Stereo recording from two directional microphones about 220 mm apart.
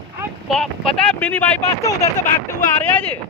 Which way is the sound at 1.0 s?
5° left (ahead or behind).